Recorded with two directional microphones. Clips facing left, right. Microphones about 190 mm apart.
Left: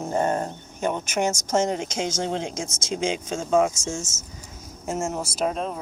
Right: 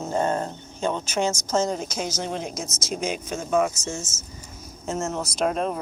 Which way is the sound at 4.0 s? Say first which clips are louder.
Left 1 dB; 45° left (ahead or behind).